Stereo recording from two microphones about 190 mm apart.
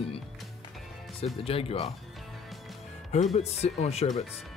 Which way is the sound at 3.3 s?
35° left (ahead or behind).